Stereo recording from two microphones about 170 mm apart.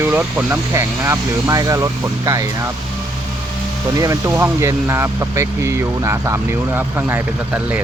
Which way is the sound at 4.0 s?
15° right (ahead or behind).